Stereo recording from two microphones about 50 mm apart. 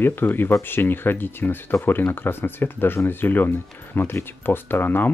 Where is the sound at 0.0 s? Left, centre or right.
Left.